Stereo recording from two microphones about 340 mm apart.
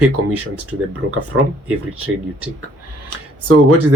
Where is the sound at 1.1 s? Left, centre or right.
Right.